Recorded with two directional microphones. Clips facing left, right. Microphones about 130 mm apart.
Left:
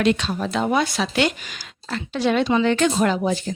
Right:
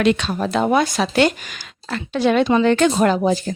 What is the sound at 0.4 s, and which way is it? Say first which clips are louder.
Speech: right 4 dB; 50° right (ahead or behind).